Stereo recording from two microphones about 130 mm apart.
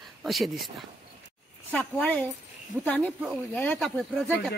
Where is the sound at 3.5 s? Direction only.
10° left (ahead or behind).